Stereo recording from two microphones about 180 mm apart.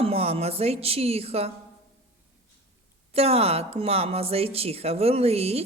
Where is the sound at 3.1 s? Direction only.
35° right (ahead or behind).